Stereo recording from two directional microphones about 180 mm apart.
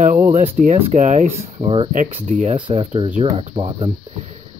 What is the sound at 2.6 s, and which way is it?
Speech, 25° right (ahead or behind).